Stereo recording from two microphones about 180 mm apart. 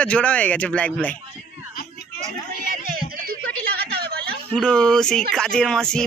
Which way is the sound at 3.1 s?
55° right (ahead or behind).